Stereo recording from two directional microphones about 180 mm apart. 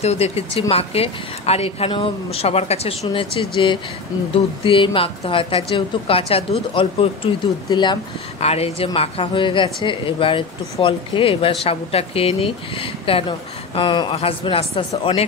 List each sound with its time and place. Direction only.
0.0 s a woman's voice: 35° left (ahead or behind)